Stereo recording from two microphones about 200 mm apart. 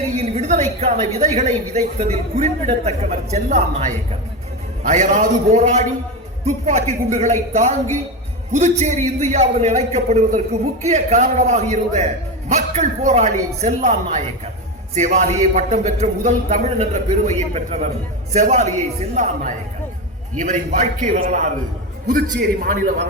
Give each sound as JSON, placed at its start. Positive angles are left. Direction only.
{"t": 0.3, "sound": "a woman's voice", "side_deg": -35}
{"t": 22.1, "sound": "a man's voice", "side_deg": -50}